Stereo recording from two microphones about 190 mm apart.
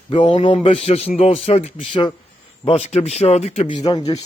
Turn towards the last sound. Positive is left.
turn(degrees=25)  # may be behind; listen again after turning